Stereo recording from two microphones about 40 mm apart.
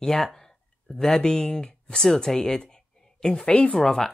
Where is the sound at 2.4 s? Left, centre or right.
Left.